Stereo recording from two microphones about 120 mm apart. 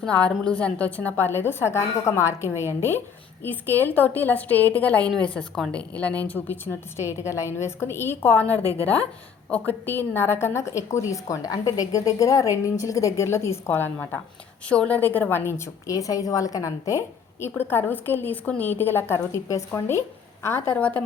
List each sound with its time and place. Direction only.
0.0 s a woman's voice: 10° left (ahead or behind)
8.4 s a woman's voice: 25° right (ahead or behind)
9.5 s a woman's voice: 15° left (ahead or behind)